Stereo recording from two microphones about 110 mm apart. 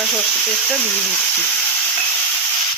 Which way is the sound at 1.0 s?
15° left (ahead or behind).